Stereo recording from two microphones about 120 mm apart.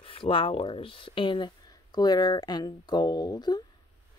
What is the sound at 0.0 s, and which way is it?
Speech, 50° left (ahead or behind).